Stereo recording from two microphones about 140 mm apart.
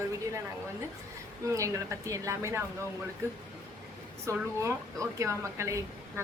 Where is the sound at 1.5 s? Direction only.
20° right (ahead or behind).